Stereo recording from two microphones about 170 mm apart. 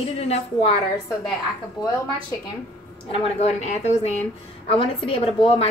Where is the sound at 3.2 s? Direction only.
40° left (ahead or behind).